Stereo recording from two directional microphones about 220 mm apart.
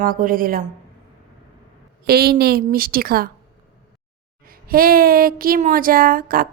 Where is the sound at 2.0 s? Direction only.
45° right (ahead or behind).